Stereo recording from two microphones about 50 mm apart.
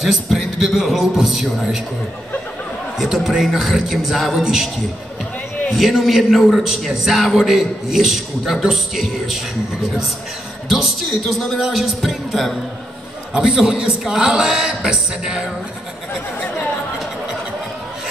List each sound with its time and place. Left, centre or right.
0.0 s a man's voice: centre
3.0 s a man's voice: centre
5.7 s a man's voice: centre
10.7 s a man's voice: centre
13.3 s a man's voice: centre